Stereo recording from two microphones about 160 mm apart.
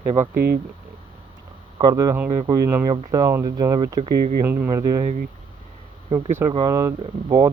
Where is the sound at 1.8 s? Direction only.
25° right (ahead or behind).